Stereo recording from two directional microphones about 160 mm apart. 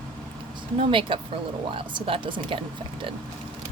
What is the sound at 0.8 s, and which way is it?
Speech, 35° right (ahead or behind).